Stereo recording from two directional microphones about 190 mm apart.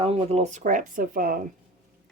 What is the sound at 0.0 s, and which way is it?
Speech, 35° right (ahead or behind).